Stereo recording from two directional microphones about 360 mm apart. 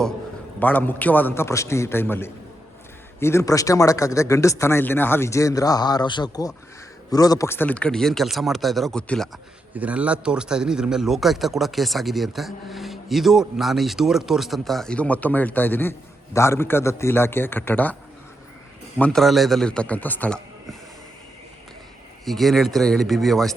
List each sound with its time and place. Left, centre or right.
0.6 s a man's voice: centre
18.9 s a man's voice: centre
22.2 s a man's voice: centre